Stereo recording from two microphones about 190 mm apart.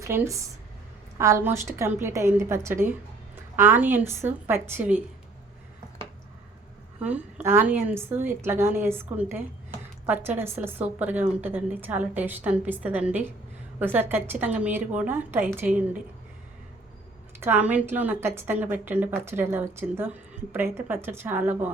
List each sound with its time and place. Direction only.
0.0 s a woman's voice: 15° right (ahead or behind)
7.0 s a woman's voice: 10° right (ahead or behind)
17.4 s a woman's voice: 10° right (ahead or behind)